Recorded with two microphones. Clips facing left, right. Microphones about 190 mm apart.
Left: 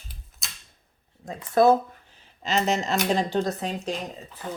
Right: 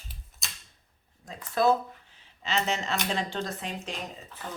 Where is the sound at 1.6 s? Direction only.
50° left (ahead or behind).